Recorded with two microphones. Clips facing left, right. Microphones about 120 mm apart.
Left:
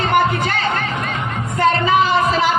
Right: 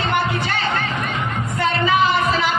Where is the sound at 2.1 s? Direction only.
40° left (ahead or behind).